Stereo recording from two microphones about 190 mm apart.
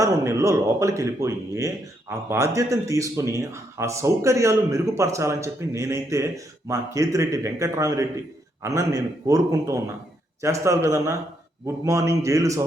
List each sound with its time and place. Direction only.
0.0 s speech: 15° right (ahead or behind)